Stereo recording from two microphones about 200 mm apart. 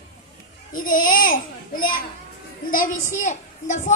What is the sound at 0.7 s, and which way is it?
A child's voice, 45° left (ahead or behind).